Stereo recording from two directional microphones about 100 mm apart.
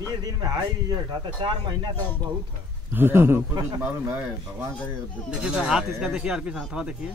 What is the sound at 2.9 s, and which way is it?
Speech, 20° right (ahead or behind).